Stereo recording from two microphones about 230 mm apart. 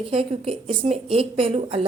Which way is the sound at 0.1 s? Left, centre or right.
Right.